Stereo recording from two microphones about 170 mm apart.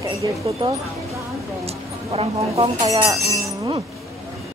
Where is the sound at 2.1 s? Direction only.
35° right (ahead or behind).